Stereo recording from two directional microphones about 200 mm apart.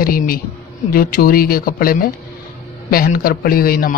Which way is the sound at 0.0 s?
45° left (ahead or behind).